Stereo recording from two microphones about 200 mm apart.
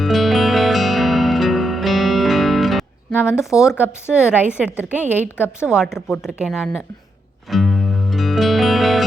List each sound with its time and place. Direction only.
0.0 s music: centre (ahead or behind)
3.2 s a woman's voice: 5° right (ahead or behind)
7.5 s music: centre (ahead or behind)